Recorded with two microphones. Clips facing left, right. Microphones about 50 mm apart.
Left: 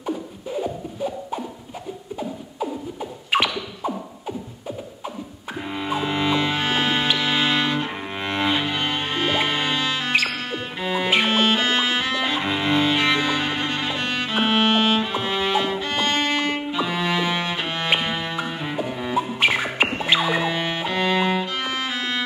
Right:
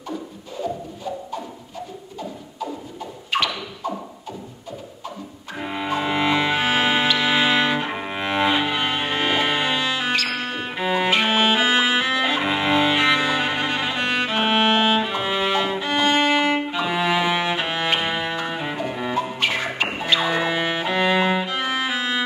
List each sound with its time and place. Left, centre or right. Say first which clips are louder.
0.0 s beatboxing: left 3 dB; centre
2.1 s beatboxing: left 2 dB; centre
5.6 s music: right 1 dB; centre
7.2 s cello: right 2 dB; centre
10.2 s music: even; centre
11.2 s cello: right 1 dB; centre
18.0 s music: right 2 dB; centre
19.3 s music: left 3 dB; centre
20.4 s music: right 2 dB; centre